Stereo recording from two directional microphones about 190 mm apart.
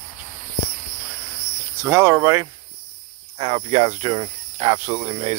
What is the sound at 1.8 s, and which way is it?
Speech, 15° right (ahead or behind).